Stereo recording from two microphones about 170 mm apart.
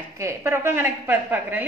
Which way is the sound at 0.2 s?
15° right (ahead or behind).